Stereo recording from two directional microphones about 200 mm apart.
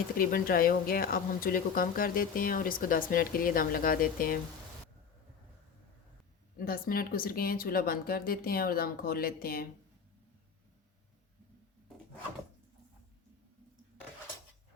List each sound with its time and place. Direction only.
0.2 s speech: 45° left (ahead or behind)
6.6 s speech: 45° left (ahead or behind)